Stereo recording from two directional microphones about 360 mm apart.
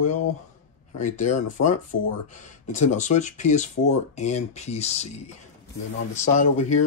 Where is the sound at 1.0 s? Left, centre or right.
Centre.